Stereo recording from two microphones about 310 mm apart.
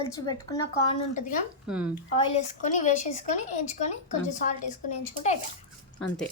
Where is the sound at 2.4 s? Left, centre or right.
Left.